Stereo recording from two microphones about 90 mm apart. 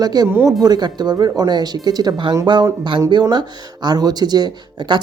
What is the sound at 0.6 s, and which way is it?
Speech, 50° right (ahead or behind).